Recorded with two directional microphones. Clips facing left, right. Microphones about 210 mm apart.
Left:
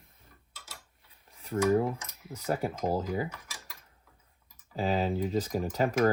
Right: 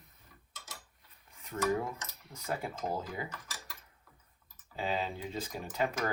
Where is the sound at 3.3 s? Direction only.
10° left (ahead or behind).